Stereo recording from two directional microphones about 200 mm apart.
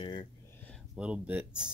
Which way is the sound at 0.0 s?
25° left (ahead or behind).